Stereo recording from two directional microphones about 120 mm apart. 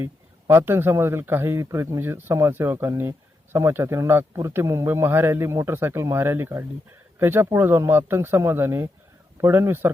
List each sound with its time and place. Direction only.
0.0 s a man's voice: 20° right (ahead or behind)